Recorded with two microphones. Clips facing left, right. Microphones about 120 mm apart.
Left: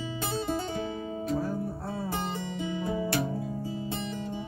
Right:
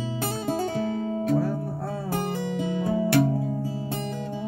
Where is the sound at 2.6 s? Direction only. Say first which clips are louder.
Right 5 dB; 55° right (ahead or behind).